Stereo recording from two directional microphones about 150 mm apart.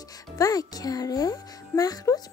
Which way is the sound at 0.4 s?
25° left (ahead or behind).